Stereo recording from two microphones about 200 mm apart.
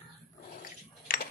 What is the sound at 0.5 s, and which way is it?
Dog, 45° left (ahead or behind).